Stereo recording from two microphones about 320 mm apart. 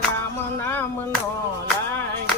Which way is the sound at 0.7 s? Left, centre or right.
Centre.